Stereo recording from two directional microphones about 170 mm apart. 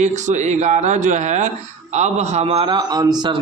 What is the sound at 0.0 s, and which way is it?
Speech, 45° right (ahead or behind).